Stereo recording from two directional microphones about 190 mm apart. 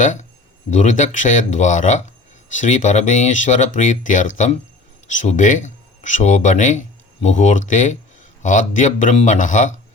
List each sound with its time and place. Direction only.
0.0 s speech: 40° left (ahead or behind)